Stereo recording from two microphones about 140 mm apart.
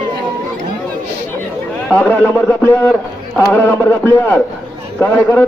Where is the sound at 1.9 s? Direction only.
10° left (ahead or behind).